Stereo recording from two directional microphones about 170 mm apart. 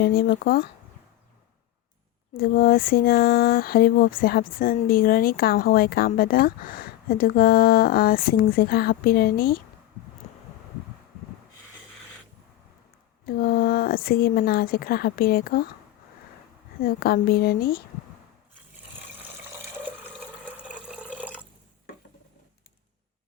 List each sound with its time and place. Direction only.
0.0 s speech: 65° left (ahead or behind)
2.3 s speech: 60° left (ahead or behind)
10.2 s vehicle: 45° left (ahead or behind)
13.2 s speech: 60° left (ahead or behind)
16.8 s speech: 65° left (ahead or behind)
20.6 s water: 5° right (ahead or behind)